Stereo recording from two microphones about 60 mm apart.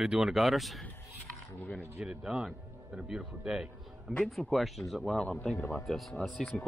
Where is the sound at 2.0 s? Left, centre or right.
Centre.